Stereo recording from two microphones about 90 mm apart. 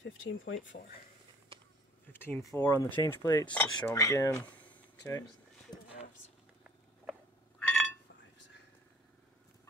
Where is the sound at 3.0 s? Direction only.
45° left (ahead or behind).